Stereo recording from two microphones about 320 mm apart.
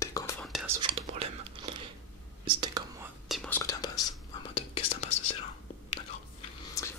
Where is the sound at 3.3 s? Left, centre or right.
Centre.